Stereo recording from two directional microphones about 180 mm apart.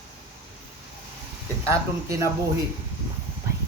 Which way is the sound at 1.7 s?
15° right (ahead or behind).